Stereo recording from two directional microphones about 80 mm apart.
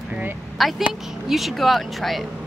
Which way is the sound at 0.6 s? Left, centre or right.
Centre.